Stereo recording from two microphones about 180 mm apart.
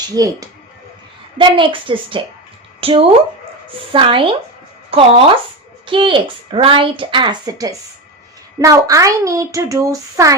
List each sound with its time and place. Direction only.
0.1 s a woman's voice: 20° right (ahead or behind)